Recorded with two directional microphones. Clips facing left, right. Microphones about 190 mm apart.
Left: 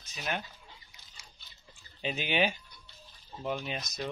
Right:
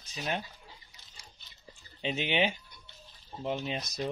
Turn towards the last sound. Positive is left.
turn(degrees=-30)  # may be behind; listen again after turning